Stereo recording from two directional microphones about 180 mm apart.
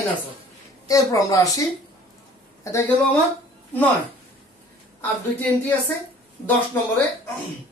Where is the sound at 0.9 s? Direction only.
20° left (ahead or behind).